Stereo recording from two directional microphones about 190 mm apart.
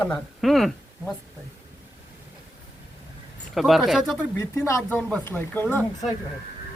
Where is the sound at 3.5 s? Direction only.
Centre (ahead or behind).